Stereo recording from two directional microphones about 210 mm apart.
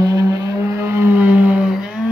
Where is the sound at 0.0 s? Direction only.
15° right (ahead or behind).